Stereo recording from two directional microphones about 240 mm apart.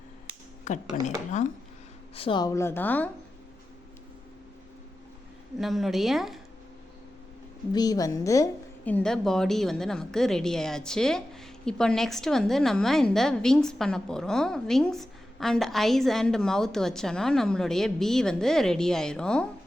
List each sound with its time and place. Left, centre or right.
0.7 s speech: left
2.1 s speech: left
5.5 s a woman's voice: centre
7.7 s a woman's voice: centre